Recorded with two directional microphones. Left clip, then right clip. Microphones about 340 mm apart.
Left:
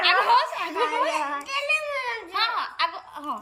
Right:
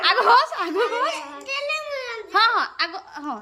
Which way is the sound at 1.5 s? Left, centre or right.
Right.